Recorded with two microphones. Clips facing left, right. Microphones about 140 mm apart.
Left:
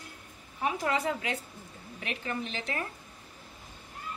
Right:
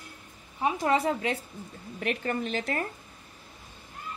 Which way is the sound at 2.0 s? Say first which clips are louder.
Right 6 dB; 45° right (ahead or behind).